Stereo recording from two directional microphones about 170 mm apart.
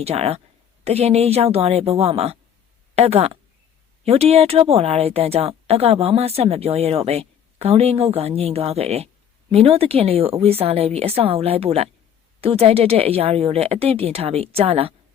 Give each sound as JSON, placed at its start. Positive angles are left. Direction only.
{"t": 0.0, "sound": "speech", "side_deg": -40}